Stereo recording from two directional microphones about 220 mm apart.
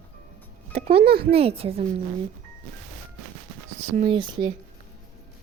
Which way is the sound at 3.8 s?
30° right (ahead or behind).